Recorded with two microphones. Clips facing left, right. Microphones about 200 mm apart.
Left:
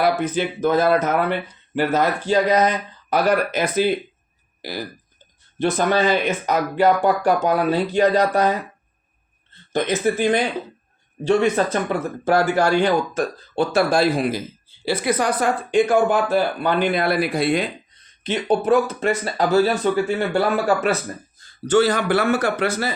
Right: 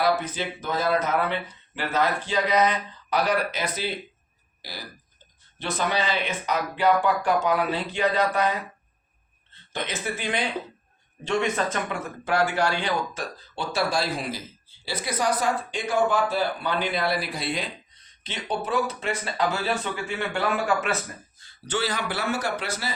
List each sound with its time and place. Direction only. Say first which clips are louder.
0.0 s speech: left 5 dB; 55° left (ahead or behind); by 8.5 s 40° left (ahead or behind)
9.7 s speech: left 11 dB; 45° left (ahead or behind)